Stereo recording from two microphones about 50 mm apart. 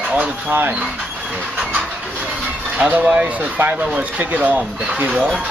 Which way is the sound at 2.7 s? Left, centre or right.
Right.